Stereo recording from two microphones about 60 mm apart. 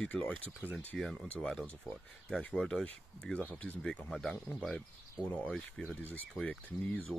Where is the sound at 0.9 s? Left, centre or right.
Centre.